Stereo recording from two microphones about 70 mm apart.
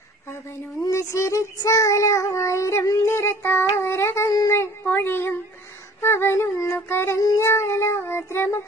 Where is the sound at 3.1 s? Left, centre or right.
Left.